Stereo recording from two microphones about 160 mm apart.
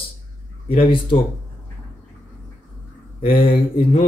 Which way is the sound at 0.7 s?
35° left (ahead or behind).